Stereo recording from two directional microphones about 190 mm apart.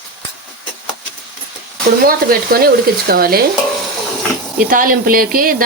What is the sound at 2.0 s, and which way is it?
Speech, 50° right (ahead or behind).